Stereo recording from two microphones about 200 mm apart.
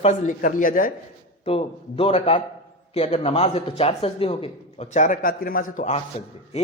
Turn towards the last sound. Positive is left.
turn(degrees=35)  # may be behind; listen again after turning